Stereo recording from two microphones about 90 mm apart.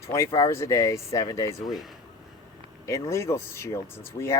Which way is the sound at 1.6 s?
Centre (ahead or behind).